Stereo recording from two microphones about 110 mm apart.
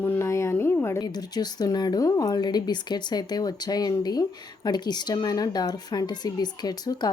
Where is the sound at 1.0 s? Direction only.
40° left (ahead or behind).